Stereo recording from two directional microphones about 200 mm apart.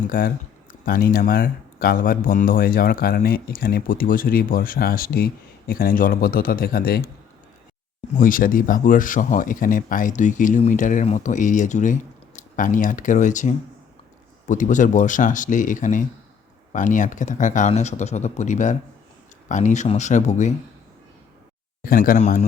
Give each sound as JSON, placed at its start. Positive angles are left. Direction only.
{"t": 0.1, "sound": "speech", "side_deg": 45}
{"t": 8.2, "sound": "speech", "side_deg": 45}
{"t": 21.8, "sound": "speech", "side_deg": 45}